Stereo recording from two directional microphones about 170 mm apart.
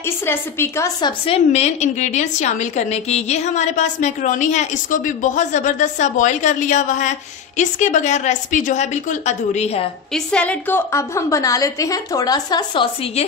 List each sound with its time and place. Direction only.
0.0 s a woman's voice: 15° left (ahead or behind)
1.2 s a woman's voice: 35° left (ahead or behind)
10.1 s a woman's voice: 5° left (ahead or behind); by 13.2 s 30° left (ahead or behind)